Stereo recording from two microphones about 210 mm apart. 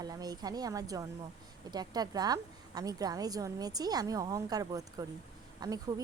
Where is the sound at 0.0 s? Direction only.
20° right (ahead or behind).